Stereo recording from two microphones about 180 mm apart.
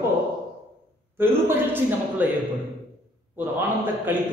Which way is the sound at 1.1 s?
10° right (ahead or behind).